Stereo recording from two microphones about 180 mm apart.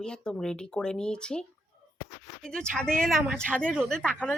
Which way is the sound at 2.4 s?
5° left (ahead or behind).